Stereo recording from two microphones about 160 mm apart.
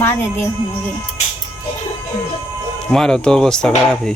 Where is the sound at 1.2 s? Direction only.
45° left (ahead or behind).